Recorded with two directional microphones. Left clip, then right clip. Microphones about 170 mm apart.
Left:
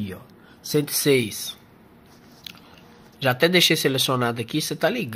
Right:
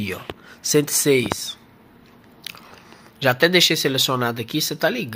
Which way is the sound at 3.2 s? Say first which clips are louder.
Right 2 dB; 5° right (ahead or behind).